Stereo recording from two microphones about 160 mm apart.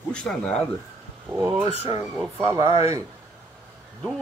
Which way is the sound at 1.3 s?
15° right (ahead or behind).